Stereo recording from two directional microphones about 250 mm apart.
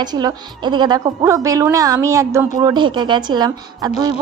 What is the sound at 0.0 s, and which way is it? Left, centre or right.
A woman's voice, centre.